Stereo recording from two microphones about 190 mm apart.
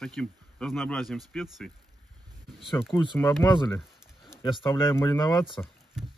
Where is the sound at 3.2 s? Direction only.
10° left (ahead or behind).